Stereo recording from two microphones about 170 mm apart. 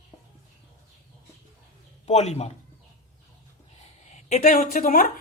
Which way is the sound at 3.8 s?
45° left (ahead or behind).